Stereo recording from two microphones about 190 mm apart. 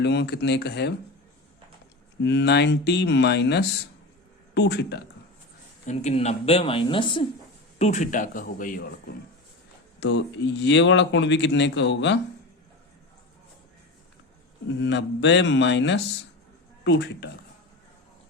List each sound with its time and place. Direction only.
0.0 s speech: 65° left (ahead or behind)
2.2 s speech: 65° left (ahead or behind)
5.8 s a woman's voice: 40° left (ahead or behind)
10.0 s speech: 70° left (ahead or behind)
14.8 s speech: 70° left (ahead or behind)